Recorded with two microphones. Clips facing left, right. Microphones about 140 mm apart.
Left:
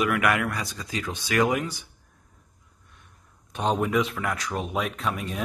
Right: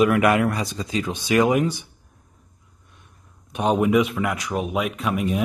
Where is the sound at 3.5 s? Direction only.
10° right (ahead or behind).